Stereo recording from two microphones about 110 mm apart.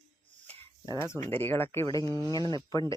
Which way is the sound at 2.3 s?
35° left (ahead or behind).